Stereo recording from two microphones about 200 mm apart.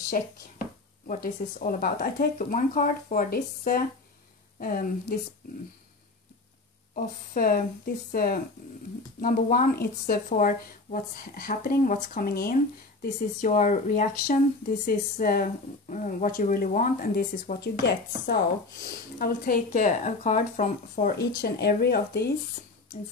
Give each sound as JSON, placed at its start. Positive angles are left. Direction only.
{"t": 0.1, "sound": "speech", "side_deg": 40}
{"t": 7.0, "sound": "speech", "side_deg": 45}